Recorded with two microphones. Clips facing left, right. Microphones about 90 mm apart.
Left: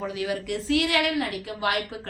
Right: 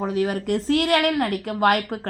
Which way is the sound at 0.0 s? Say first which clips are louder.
Right 6 dB; 40° right (ahead or behind).